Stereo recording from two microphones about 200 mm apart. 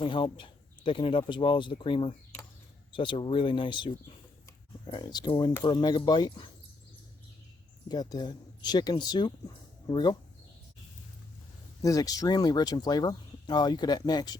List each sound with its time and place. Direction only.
0.0 s speech: 25° left (ahead or behind)
7.9 s speech: 20° left (ahead or behind)
11.8 s speech: 15° left (ahead or behind)